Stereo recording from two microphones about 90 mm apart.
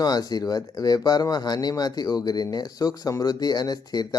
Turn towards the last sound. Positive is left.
turn(degrees=50)  # may be behind; listen again after turning